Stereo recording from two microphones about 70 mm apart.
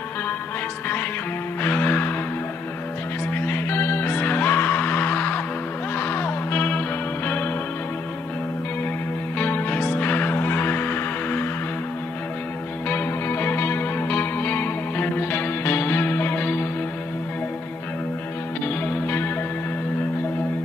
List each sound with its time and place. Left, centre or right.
1.6 s music: left
3.4 s music: left
9.4 s music: left
12.8 s music: left
18.9 s music: left